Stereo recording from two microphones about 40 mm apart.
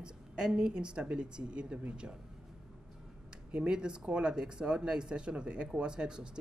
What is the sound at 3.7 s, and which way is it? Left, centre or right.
Speech, right.